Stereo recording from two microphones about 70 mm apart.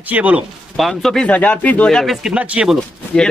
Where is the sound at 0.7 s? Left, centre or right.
Centre.